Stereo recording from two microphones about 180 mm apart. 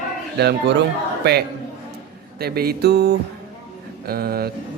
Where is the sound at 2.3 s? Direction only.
60° right (ahead or behind).